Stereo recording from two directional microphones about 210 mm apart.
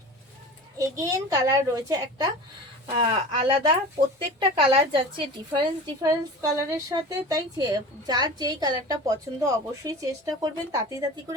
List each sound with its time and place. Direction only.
0.8 s a woman's voice: 15° right (ahead or behind)